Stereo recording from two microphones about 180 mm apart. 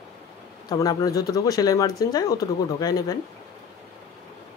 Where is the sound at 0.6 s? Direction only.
20° left (ahead or behind).